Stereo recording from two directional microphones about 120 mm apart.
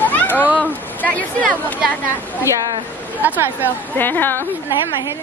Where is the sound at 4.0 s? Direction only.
15° left (ahead or behind).